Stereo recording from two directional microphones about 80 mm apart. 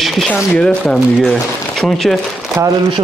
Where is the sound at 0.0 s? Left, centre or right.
Centre.